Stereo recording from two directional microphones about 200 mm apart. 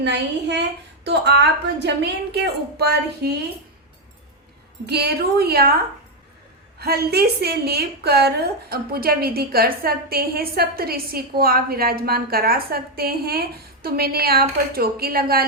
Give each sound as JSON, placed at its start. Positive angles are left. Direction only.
{"t": 0.0, "sound": "a woman's voice", "side_deg": -60}
{"t": 4.9, "sound": "a woman's voice", "side_deg": -55}
{"t": 6.7, "sound": "a woman's voice", "side_deg": -50}